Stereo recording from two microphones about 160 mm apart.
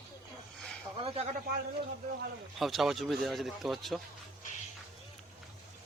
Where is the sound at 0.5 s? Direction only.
5° left (ahead or behind).